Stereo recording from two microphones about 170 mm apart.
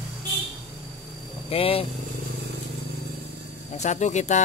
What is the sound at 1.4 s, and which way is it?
Speech, 35° left (ahead or behind).